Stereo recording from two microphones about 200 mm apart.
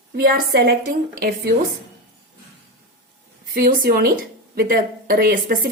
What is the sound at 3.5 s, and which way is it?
Speech, 45° right (ahead or behind).